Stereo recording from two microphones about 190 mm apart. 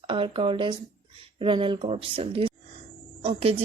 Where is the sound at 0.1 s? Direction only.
25° right (ahead or behind).